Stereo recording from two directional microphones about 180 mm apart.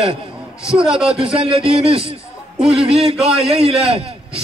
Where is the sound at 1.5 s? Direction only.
30° right (ahead or behind).